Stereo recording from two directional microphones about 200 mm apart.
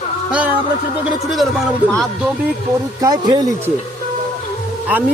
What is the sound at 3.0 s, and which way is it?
Speech, 20° right (ahead or behind).